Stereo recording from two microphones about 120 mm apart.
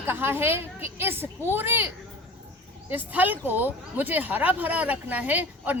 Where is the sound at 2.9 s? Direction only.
15° right (ahead or behind).